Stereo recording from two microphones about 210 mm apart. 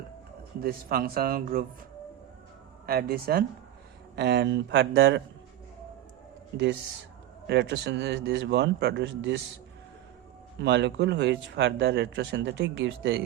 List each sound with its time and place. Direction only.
0.6 s speech: 45° right (ahead or behind)
2.8 s speech: 45° right (ahead or behind)
7.4 s speech: 55° right (ahead or behind)
10.6 s speech: 55° right (ahead or behind)